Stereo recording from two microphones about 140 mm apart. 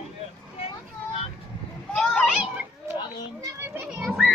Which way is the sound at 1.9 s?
5° left (ahead or behind).